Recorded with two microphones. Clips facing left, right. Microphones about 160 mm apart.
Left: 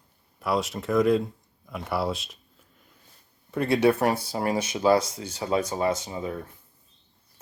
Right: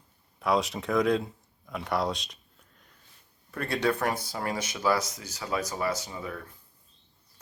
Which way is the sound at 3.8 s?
30° left (ahead or behind).